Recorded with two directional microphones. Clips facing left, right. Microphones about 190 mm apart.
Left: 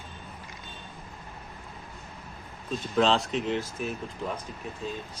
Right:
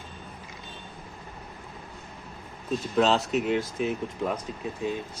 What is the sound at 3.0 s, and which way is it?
Speech, 5° right (ahead or behind).